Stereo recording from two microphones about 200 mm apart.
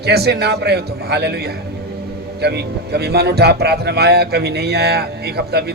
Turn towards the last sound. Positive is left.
turn(degrees=-50)  # may be behind; listen again after turning